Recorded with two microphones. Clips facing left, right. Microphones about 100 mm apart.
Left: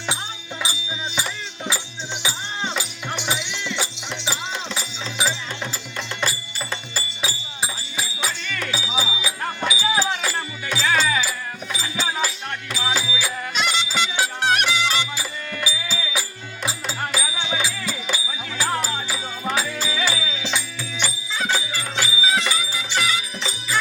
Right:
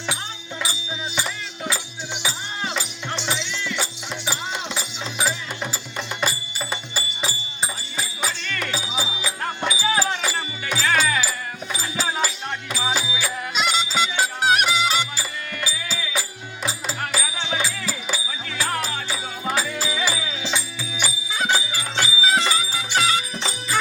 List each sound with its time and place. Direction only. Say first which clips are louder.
0.7 s music: even; centre (ahead or behind)
3.2 s music: even; 15° left (ahead or behind)
4.3 s music: even; centre (ahead or behind)
7.6 s music: even; 5° left (ahead or behind)
9.7 s a sound: even; centre (ahead or behind)
10.4 s music: even; 5° right (ahead or behind)
18.5 s music: left 2 dB; 15° left (ahead or behind)
19.5 s music: even; centre (ahead or behind)
21.9 s music: right 2 dB; 30° right (ahead or behind)